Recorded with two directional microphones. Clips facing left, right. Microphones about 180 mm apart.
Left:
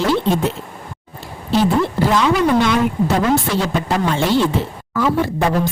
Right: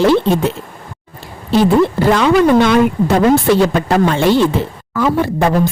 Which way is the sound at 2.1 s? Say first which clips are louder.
Right 4 dB; 60° right (ahead or behind).